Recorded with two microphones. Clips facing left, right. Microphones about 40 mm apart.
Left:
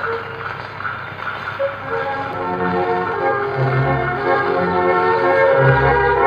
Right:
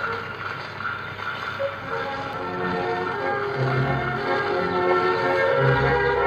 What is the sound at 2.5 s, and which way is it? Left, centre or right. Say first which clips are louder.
Music: left 7 dB; left.